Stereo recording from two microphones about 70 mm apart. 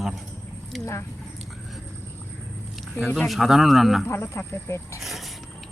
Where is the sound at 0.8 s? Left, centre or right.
Left.